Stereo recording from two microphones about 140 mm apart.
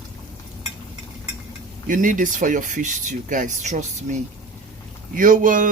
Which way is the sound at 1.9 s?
70° right (ahead or behind).